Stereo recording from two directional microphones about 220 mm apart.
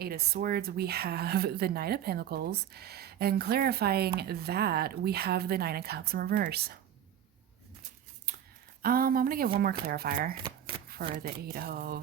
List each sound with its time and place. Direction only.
0.0 s speech: 45° right (ahead or behind)
8.8 s speech: 40° right (ahead or behind)